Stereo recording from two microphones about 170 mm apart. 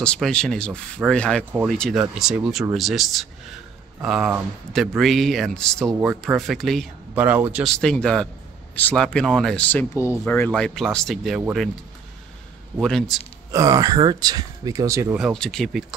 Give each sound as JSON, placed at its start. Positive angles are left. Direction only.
{"t": 0.0, "sound": "speech", "side_deg": 5}
{"t": 7.2, "sound": "speech", "side_deg": -10}
{"t": 7.6, "sound": "speech", "side_deg": 5}
{"t": 12.8, "sound": "speech", "side_deg": 0}
{"t": 13.5, "sound": "speech", "side_deg": -20}
{"t": 15.1, "sound": "speech", "side_deg": 0}